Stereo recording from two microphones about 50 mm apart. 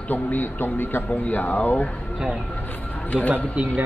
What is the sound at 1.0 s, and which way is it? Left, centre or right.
Speech, left.